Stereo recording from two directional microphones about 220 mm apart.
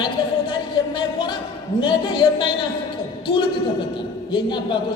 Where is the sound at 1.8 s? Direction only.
20° left (ahead or behind).